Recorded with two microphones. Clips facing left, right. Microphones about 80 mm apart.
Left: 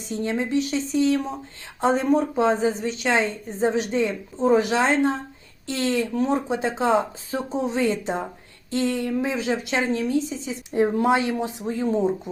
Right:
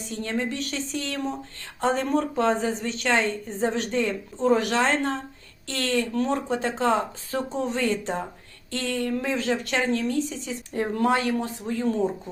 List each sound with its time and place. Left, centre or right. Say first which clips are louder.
0.1 s a woman's voice: left 5 dB; centre